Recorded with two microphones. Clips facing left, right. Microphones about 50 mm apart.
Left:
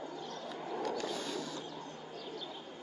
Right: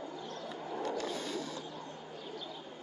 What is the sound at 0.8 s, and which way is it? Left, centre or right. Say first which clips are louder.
Roaring cats: right 1 dB; right.